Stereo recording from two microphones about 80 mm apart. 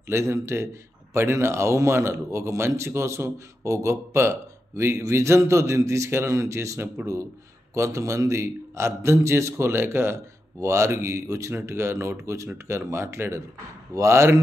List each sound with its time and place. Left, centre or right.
0.1 s a man's voice: right